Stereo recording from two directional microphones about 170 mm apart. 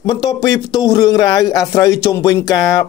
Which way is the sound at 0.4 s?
20° left (ahead or behind).